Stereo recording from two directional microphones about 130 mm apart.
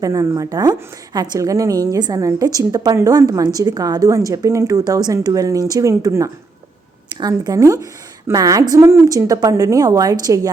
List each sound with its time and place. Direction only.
0.0 s a woman's voice: 25° right (ahead or behind)